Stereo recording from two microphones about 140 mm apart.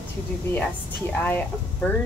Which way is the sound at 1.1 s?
10° left (ahead or behind).